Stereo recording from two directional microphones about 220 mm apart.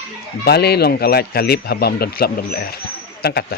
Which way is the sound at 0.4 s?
45° left (ahead or behind).